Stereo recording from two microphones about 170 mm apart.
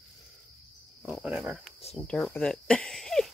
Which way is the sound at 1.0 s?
5° right (ahead or behind).